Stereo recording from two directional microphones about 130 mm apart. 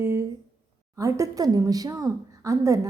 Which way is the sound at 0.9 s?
25° right (ahead or behind).